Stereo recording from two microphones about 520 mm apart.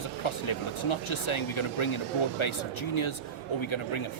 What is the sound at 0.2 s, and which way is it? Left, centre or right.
Speech, left.